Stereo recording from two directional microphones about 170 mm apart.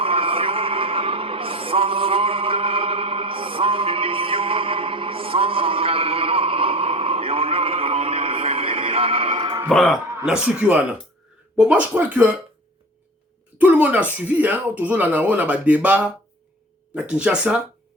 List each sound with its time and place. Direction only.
0.0 s music: 30° right (ahead or behind)
9.6 s speech: centre (ahead or behind)
13.6 s speech: 10° right (ahead or behind)